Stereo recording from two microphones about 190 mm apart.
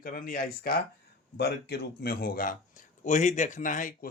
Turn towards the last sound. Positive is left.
turn(degrees=45)  # may be behind; listen again after turning